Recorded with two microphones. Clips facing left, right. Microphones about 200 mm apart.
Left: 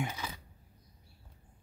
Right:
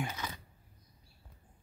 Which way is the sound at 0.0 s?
10° left (ahead or behind).